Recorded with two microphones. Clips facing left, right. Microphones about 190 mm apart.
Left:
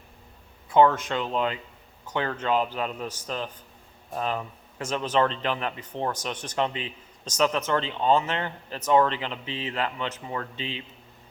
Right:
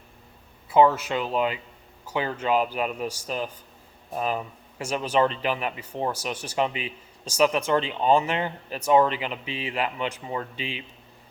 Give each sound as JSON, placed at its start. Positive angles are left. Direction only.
{"t": 0.7, "sound": "speech", "side_deg": -10}